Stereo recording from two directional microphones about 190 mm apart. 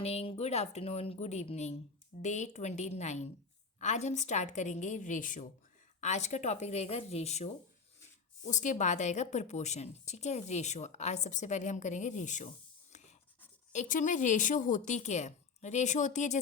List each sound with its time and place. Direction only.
0.0 s a woman's voice: 35° left (ahead or behind)
13.7 s a woman's voice: 40° left (ahead or behind)